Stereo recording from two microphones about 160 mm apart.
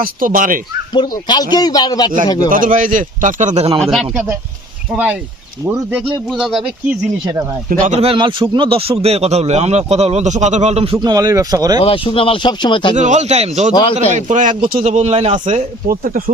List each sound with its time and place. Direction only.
0.0 s a man's voice: 60° right (ahead or behind)
0.9 s a man's voice: 25° left (ahead or behind)
2.5 s a man's voice: 55° right (ahead or behind)
3.8 s speech: centre (ahead or behind)
7.7 s speech: 50° right (ahead or behind)
10.9 s speech: 25° right (ahead or behind)
11.8 s speech: 35° left (ahead or behind)
13.0 s a man's voice: 45° right (ahead or behind)
14.8 s speech: 40° right (ahead or behind)
15.9 s a man's voice: 65° right (ahead or behind)